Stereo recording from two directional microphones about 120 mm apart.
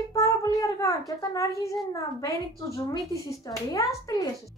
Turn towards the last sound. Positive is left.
turn(degrees=30)  # may be behind; listen again after turning